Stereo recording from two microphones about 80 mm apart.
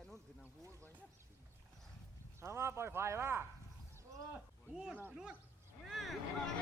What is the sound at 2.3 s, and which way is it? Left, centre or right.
Speech, right.